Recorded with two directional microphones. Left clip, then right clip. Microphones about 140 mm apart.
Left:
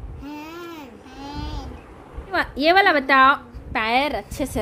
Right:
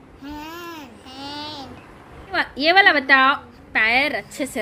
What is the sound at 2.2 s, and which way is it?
A woman's voice, 25° left (ahead or behind).